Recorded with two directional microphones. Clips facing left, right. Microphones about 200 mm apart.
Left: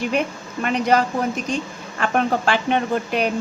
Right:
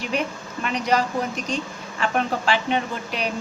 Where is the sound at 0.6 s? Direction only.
50° left (ahead or behind).